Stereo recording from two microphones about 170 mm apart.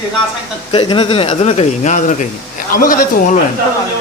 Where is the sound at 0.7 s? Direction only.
30° left (ahead or behind); by 2.3 s 45° left (ahead or behind).